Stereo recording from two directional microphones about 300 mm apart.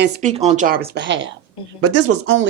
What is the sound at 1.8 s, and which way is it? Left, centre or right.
Speech, right.